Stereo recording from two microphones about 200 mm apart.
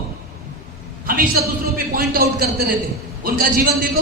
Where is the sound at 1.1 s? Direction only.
45° right (ahead or behind).